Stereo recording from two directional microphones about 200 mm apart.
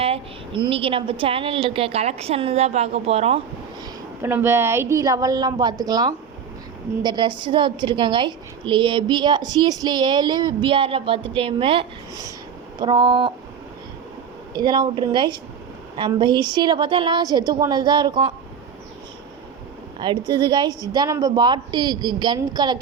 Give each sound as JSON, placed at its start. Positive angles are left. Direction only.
{"t": 0.0, "sound": "a woman's voice", "side_deg": -25}
{"t": 4.2, "sound": "a woman's voice", "side_deg": -10}
{"t": 14.5, "sound": "a woman's voice", "side_deg": -20}
{"t": 20.0, "sound": "a woman's voice", "side_deg": -20}